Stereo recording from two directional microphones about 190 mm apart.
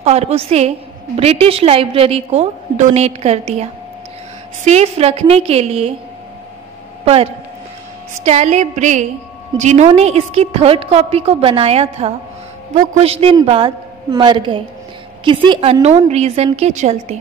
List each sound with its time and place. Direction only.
0.0 s a woman's voice: 35° right (ahead or behind)
4.6 s a woman's voice: 35° right (ahead or behind)
8.1 s a woman's voice: 35° right (ahead or behind)